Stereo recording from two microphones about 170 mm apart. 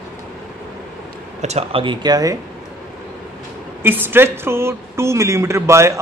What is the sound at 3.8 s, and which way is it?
A woman's voice, 10° right (ahead or behind).